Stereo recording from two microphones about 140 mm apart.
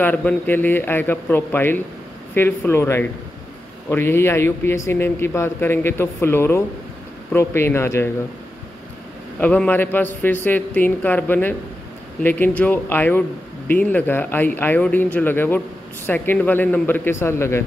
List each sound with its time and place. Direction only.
0.0 s speech: 10° left (ahead or behind)
9.4 s speech: 10° left (ahead or behind)